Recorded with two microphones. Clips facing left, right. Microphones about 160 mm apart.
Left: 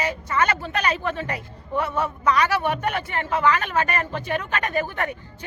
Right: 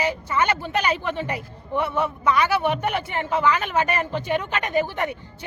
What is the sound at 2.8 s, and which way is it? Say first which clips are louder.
A woman's voice: right 1 dB; 10° right (ahead or behind).